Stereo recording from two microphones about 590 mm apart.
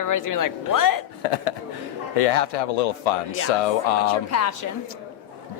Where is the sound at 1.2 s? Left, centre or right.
Left.